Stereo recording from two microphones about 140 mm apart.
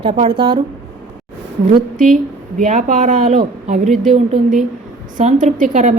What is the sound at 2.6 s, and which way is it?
A woman's voice, 65° right (ahead or behind).